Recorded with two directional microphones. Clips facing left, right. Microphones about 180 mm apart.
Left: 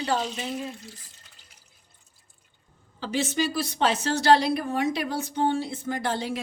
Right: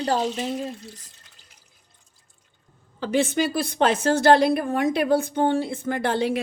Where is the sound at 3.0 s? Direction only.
55° right (ahead or behind).